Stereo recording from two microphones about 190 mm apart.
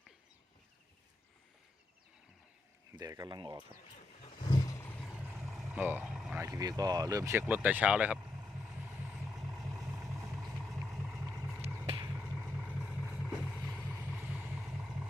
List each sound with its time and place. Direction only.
2.9 s speech: 20° right (ahead or behind)
4.4 s roar: 20° left (ahead or behind); by 5.2 s 5° left (ahead or behind)
5.2 s vehicle: centre (ahead or behind)
6.4 s a sound: 20° right (ahead or behind)
12.0 s vehicle: 10° right (ahead or behind); by 14.2 s 5° left (ahead or behind)
14.2 s vehicle: 10° right (ahead or behind)